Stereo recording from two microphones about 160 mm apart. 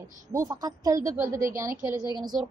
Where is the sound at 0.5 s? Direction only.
25° right (ahead or behind).